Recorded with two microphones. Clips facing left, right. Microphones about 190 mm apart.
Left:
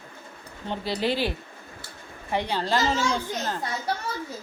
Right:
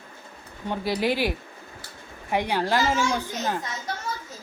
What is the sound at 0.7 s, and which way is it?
A woman's voice, 10° right (ahead or behind).